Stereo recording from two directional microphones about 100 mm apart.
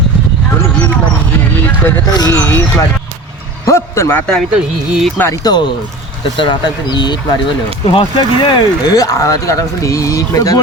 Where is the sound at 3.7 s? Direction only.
30° left (ahead or behind).